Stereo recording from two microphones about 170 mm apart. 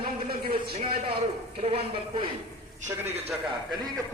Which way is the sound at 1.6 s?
35° right (ahead or behind).